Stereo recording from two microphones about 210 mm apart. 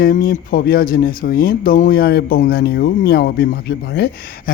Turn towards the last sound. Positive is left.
turn(degrees=50)  # may be behind; listen again after turning